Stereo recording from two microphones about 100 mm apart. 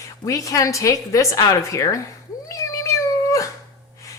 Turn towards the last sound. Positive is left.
turn(degrees=30)  # may be behind; listen again after turning